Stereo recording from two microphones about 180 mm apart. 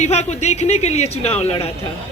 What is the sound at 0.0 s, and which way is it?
A man's voice, 40° left (ahead or behind).